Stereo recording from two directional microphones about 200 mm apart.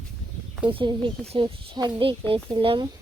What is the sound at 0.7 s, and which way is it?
Speech, 25° right (ahead or behind).